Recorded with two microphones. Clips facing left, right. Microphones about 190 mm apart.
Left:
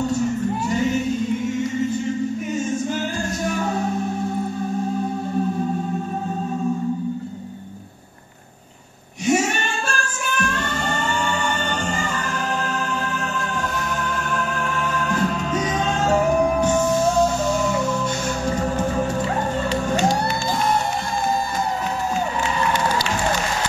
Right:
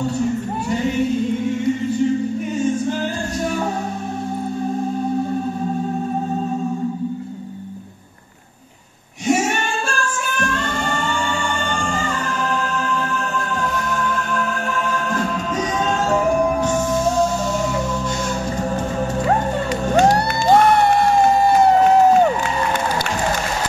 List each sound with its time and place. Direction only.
20.0 s music: 60° right (ahead or behind)